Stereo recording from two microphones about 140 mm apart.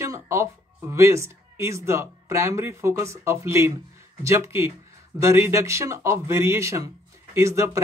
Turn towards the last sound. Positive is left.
turn(degrees=-20)  # may be behind; listen again after turning